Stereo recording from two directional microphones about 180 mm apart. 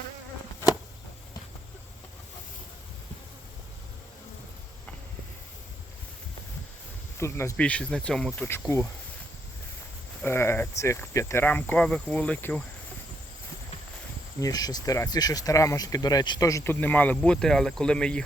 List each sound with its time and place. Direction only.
7.2 s speech: 15° left (ahead or behind)
10.2 s speech: 15° left (ahead or behind)
14.3 s speech: 20° left (ahead or behind)